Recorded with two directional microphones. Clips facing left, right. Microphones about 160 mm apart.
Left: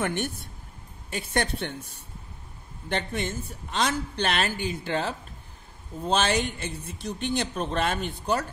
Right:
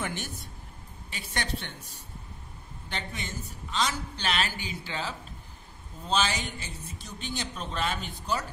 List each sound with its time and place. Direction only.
0.0 s speech: 60° left (ahead or behind)